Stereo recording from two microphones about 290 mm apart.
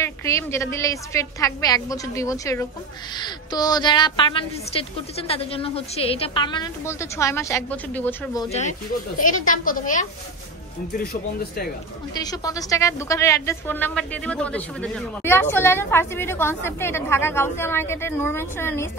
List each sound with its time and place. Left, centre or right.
0.0 s a woman's voice: centre; by 10.0 s left
12.1 s a woman's voice: centre